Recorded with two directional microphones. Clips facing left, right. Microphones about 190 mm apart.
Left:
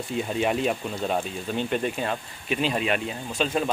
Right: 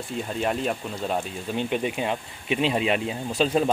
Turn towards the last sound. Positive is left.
turn(degrees=-35)  # may be behind; listen again after turning